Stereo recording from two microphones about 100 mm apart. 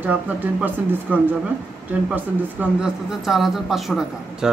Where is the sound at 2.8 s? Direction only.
5° right (ahead or behind).